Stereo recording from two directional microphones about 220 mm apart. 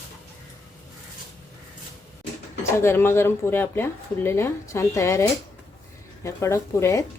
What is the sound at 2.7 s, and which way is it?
Speech, 10° left (ahead or behind).